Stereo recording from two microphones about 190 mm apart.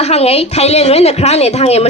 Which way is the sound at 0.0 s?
35° left (ahead or behind).